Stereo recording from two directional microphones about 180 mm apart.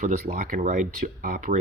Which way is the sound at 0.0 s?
45° right (ahead or behind).